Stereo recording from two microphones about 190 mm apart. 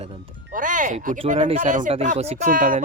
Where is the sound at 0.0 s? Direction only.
30° right (ahead or behind).